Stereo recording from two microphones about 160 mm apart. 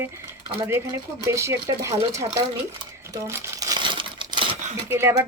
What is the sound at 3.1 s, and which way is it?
Crumpling, 20° right (ahead or behind).